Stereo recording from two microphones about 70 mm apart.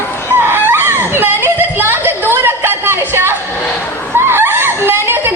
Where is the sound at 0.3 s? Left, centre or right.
Right.